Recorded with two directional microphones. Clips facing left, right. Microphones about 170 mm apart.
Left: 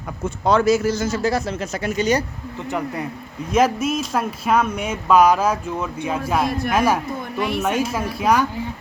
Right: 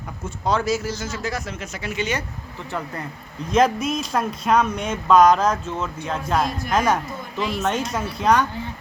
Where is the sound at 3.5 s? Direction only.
5° left (ahead or behind).